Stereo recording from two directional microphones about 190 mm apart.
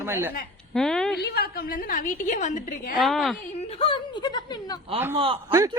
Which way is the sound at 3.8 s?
25° left (ahead or behind).